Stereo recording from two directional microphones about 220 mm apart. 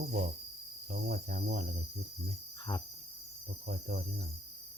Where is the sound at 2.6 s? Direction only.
20° left (ahead or behind).